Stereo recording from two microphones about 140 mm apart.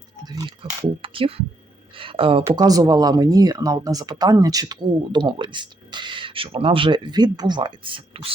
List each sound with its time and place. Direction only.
0.3 s a sound: 30° right (ahead or behind)
1.0 s speech: 40° right (ahead or behind)
2.6 s speech: 25° right (ahead or behind)